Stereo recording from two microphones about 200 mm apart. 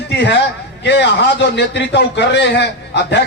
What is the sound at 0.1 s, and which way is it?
A man's voice, 60° left (ahead or behind).